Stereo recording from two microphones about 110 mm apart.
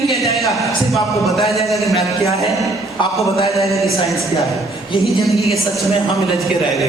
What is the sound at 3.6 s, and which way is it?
A man's voice, centre (ahead or behind).